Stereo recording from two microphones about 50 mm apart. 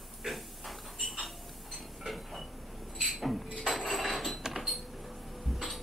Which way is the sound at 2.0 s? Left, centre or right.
Centre.